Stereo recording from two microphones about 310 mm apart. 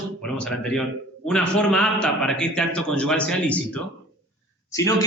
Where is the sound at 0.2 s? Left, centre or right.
Centre.